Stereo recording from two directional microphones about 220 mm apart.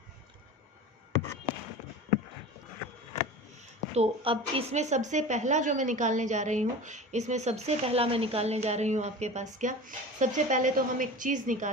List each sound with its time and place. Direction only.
3.9 s a woman's voice: 25° right (ahead or behind)